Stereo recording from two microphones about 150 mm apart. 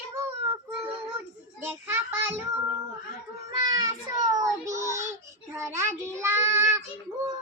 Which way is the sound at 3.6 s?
25° right (ahead or behind).